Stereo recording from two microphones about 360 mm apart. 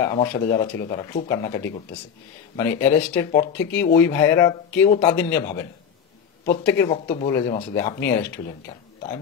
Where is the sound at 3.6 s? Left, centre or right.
Left.